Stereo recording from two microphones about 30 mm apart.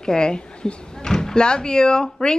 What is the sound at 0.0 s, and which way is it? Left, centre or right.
Speech, left.